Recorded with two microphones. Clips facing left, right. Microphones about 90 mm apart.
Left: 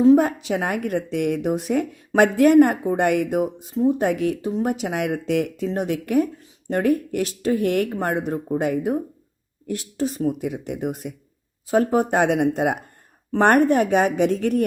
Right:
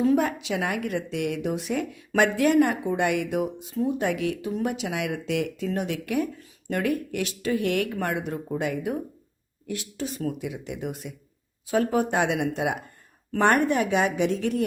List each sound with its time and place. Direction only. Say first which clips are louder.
0.2 s a woman's voice: left 4 dB; 40° left (ahead or behind)
10.4 s a woman's voice: left 6 dB; 50° left (ahead or behind)